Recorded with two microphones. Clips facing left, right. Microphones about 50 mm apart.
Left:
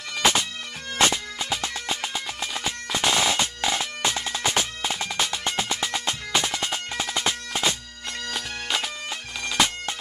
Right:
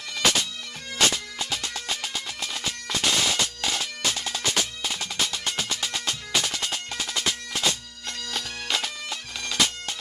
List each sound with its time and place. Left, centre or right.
0.1 s bagpipes: left
0.9 s music: left
8.3 s bagpipes: centre
9.6 s bagpipes: left